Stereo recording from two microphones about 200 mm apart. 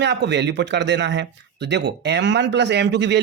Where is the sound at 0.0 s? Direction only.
60° right (ahead or behind).